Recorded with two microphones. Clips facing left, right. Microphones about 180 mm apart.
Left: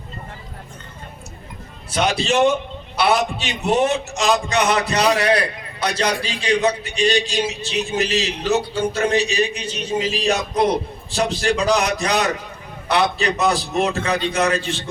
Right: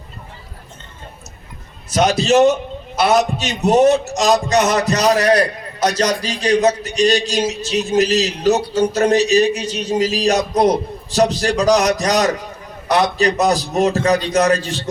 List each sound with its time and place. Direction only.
1.9 s a man's voice: 40° right (ahead or behind)